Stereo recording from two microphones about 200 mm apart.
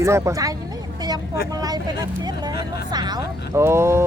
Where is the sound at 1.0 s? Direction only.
20° right (ahead or behind).